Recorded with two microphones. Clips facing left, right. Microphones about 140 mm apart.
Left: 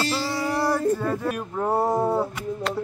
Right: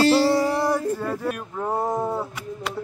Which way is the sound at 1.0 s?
Centre (ahead or behind).